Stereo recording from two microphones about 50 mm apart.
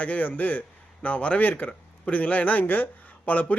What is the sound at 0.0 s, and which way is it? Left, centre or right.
Speech, left.